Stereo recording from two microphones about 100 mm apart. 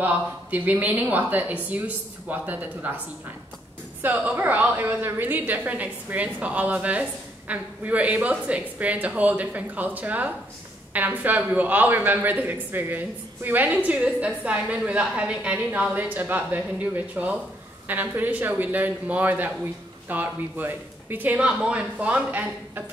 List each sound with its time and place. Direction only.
0.0 s speech: 15° right (ahead or behind)
4.0 s speech: 15° right (ahead or behind)